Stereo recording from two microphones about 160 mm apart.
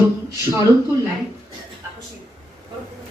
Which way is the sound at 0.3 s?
20° right (ahead or behind).